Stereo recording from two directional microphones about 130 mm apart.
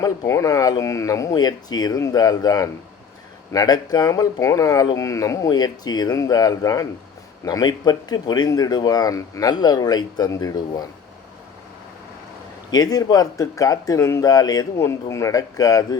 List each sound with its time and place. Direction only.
0.0 s speech: 25° left (ahead or behind)
12.7 s speech: 30° left (ahead or behind)